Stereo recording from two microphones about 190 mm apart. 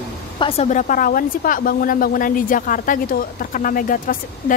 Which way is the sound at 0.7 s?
40° left (ahead or behind).